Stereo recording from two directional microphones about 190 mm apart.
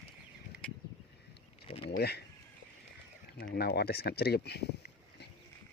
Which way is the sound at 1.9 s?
60° left (ahead or behind).